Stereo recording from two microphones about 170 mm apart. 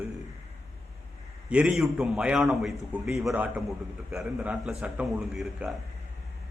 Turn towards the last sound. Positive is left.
turn(degrees=0)  # may be behind; listen again after turning